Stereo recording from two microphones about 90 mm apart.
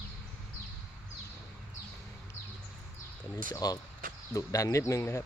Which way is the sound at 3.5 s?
45° left (ahead or behind).